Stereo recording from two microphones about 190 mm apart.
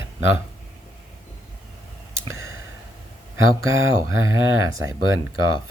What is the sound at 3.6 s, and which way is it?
Speech, 90° right.